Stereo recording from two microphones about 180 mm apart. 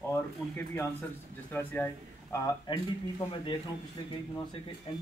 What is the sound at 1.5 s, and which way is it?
Speech, 10° left (ahead or behind).